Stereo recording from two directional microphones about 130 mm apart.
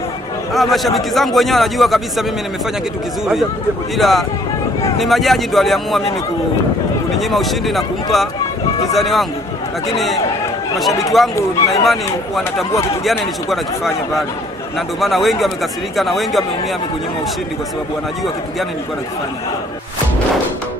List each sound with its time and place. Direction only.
0.5 s a man's voice: centre (ahead or behind)
4.0 s a man's voice: centre (ahead or behind)
7.2 s a man's voice: centre (ahead or behind)
11.8 s a man's voice: centre (ahead or behind)